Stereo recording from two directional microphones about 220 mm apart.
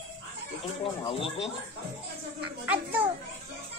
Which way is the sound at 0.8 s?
25° left (ahead or behind).